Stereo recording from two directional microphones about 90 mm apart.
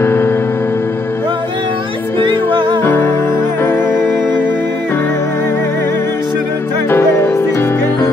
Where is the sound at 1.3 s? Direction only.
65° right (ahead or behind).